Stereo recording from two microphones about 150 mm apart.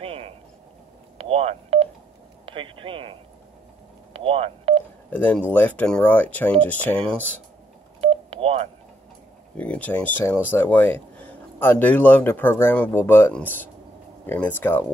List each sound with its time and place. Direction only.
0.0 s a sound: 40° right (ahead or behind)
1.1 s telephone dialing: 45° right (ahead or behind)
2.4 s speech: 35° right (ahead or behind)
4.1 s telephone dialing: 40° right (ahead or behind)
5.1 s a man's voice: 10° left (ahead or behind)
8.0 s telephone dialing: 40° right (ahead or behind)
9.6 s a man's voice: 10° left (ahead or behind)